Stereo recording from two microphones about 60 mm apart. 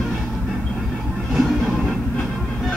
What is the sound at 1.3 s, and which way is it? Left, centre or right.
Music, centre.